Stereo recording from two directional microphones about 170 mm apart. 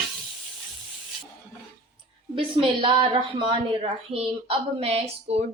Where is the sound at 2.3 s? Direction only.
30° right (ahead or behind).